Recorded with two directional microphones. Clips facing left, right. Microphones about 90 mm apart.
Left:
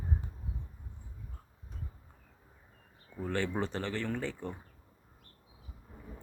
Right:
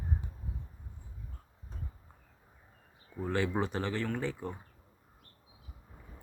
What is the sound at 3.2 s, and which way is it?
Speech, 10° right (ahead or behind).